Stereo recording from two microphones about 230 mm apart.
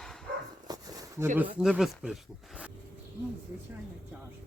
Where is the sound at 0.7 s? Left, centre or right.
Centre.